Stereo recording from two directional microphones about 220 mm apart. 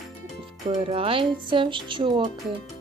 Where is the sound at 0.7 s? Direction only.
25° right (ahead or behind).